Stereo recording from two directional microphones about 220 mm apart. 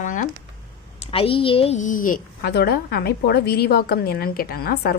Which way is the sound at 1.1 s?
25° left (ahead or behind).